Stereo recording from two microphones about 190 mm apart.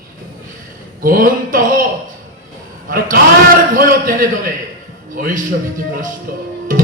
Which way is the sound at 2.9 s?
50° right (ahead or behind).